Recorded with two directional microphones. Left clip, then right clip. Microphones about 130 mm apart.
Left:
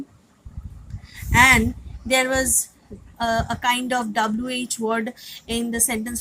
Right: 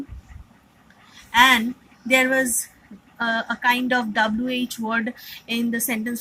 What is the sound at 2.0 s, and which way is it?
A woman's voice, 60° left (ahead or behind).